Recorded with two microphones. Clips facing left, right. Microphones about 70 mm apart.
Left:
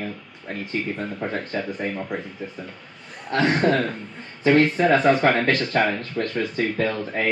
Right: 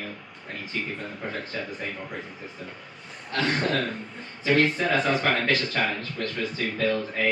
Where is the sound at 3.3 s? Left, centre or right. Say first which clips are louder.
Left 6 dB; left.